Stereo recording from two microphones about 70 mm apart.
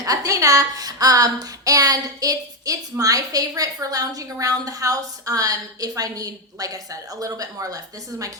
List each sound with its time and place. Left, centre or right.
0.0 s a woman's voice: right